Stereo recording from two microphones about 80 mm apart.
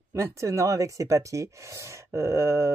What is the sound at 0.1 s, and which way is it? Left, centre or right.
Speech, right.